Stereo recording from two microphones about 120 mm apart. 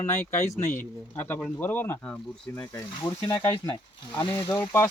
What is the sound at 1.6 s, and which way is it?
Speech, 15° left (ahead or behind).